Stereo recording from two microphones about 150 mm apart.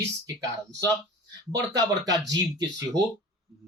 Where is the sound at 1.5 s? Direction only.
25° right (ahead or behind).